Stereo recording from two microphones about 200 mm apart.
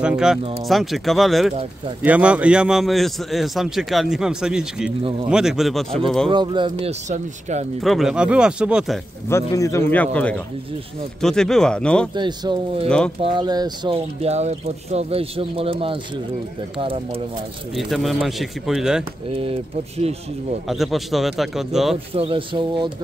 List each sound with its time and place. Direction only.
0.0 s a man's voice: 5° right (ahead or behind)
6.3 s speech: 25° right (ahead or behind)
7.8 s a man's voice: centre (ahead or behind)
9.3 s a man's voice: 15° left (ahead or behind)
12.2 s speech: 20° right (ahead or behind)
17.7 s a man's voice: centre (ahead or behind)
19.2 s speech: 30° right (ahead or behind)
20.6 s a man's voice: centre (ahead or behind)
22.1 s speech: 25° right (ahead or behind)